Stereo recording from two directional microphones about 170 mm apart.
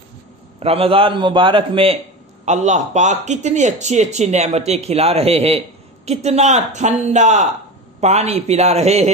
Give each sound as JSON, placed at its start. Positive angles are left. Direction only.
{"t": 0.6, "sound": "a man's voice", "side_deg": -35}
{"t": 2.4, "sound": "a man's voice", "side_deg": -45}